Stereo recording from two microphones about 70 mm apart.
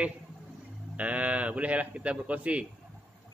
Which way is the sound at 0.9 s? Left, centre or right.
Centre.